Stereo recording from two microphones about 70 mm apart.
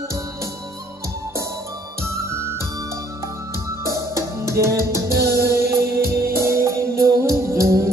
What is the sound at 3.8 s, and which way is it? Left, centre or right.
Music, right.